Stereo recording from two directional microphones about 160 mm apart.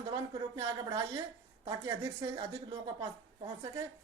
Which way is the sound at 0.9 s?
20° right (ahead or behind).